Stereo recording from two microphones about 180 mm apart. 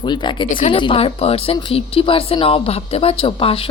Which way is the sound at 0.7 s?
30° left (ahead or behind).